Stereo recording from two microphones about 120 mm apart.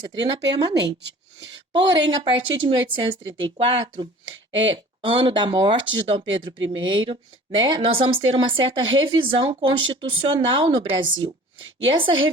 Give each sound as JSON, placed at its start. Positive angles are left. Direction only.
{"t": 0.1, "sound": "speech", "side_deg": -40}
{"t": 1.7, "sound": "speech", "side_deg": -45}